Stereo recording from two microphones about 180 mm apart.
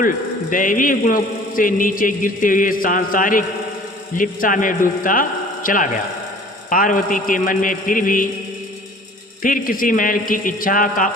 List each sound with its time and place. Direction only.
0.5 s a man's voice: 50° left (ahead or behind)
9.4 s a man's voice: 50° left (ahead or behind)